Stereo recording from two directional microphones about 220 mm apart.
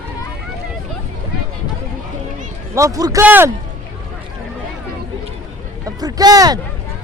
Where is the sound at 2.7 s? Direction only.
15° right (ahead or behind).